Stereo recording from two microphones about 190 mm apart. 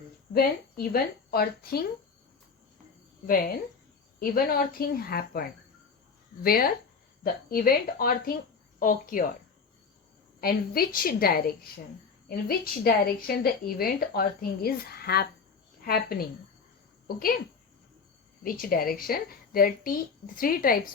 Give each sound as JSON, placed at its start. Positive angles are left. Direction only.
{"t": 0.3, "sound": "a woman's voice", "side_deg": 50}
{"t": 3.2, "sound": "a woman's voice", "side_deg": 50}
{"t": 6.4, "sound": "a woman's voice", "side_deg": 50}
{"t": 10.4, "sound": "a woman's voice", "side_deg": 50}
{"t": 18.4, "sound": "a woman's voice", "side_deg": 50}